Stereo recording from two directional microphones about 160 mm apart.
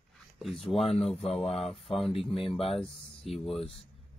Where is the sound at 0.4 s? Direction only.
Centre (ahead or behind).